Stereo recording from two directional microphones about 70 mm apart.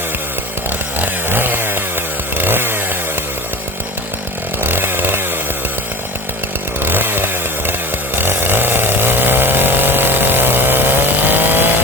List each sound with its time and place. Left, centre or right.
0.9 s chainsaw: right
4.6 s chainsaw: right
6.8 s chainsaw: right